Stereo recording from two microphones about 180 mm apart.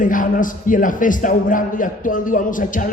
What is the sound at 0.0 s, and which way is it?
A man's voice, 45° left (ahead or behind).